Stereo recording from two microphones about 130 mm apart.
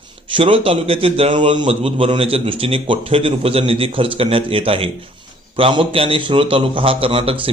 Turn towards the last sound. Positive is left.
turn(degrees=-45)  # may be behind; listen again after turning